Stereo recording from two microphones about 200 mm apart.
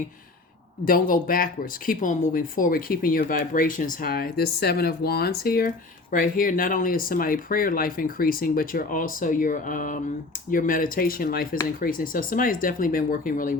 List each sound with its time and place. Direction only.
0.9 s speech: 45° left (ahead or behind)